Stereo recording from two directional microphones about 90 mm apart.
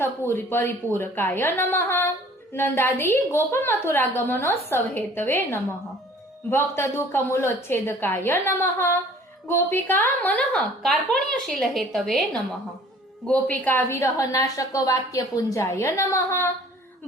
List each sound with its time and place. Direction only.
0.0 s a woman's voice: 25° left (ahead or behind)
10.8 s a woman's voice: centre (ahead or behind)
13.2 s a woman's voice: 15° left (ahead or behind)